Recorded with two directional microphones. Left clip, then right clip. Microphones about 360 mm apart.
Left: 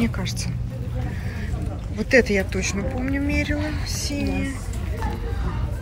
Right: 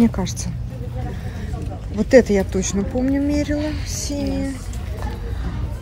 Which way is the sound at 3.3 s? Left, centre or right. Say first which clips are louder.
Right 3 dB; centre.